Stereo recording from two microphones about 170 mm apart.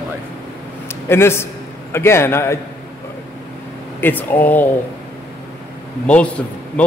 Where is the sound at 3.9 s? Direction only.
10° left (ahead or behind).